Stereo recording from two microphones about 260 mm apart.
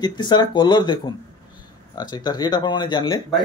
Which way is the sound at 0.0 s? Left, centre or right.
Centre.